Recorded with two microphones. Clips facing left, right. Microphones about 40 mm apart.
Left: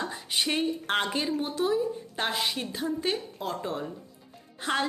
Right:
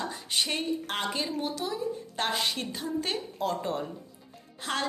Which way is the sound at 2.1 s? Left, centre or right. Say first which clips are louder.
Even; centre.